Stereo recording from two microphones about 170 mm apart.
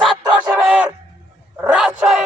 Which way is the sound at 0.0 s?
5° right (ahead or behind).